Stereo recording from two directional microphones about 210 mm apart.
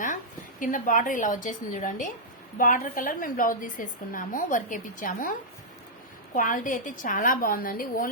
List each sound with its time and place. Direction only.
0.6 s a woman's voice: 40° left (ahead or behind)
6.3 s a woman's voice: 40° left (ahead or behind)